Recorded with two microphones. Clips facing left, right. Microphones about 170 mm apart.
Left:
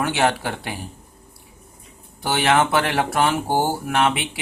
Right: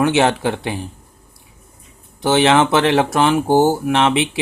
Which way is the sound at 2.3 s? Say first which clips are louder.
Right 5 dB; 25° right (ahead or behind).